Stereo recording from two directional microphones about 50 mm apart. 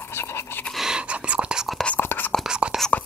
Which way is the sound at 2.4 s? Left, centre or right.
Centre.